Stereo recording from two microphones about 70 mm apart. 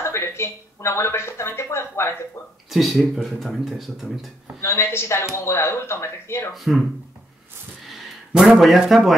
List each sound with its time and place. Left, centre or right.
0.0 s speech: left
2.7 s speech: centre
4.6 s speech: left
6.5 s speech: centre
8.3 s speech: centre